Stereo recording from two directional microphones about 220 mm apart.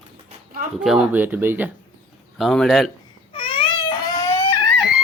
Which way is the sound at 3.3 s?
25° left (ahead or behind).